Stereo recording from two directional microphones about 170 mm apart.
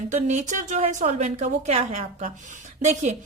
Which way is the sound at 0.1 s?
45° right (ahead or behind).